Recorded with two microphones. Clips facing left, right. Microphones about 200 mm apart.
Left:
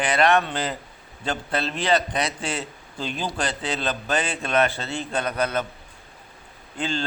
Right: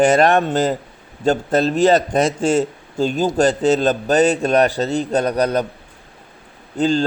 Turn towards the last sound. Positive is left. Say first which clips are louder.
# right 11 dB
turn(degrees=-40)  # may be behind; listen again after turning